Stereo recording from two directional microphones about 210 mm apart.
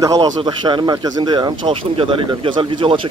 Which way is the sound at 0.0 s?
15° right (ahead or behind).